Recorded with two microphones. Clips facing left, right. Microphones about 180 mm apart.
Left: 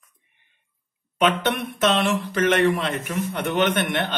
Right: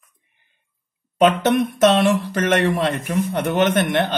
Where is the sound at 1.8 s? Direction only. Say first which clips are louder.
Right 4 dB; 40° right (ahead or behind).